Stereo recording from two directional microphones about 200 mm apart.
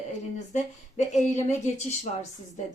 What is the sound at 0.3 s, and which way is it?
Speech, 35° left (ahead or behind).